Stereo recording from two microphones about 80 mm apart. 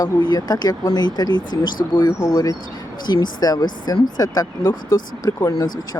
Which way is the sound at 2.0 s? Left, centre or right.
Left.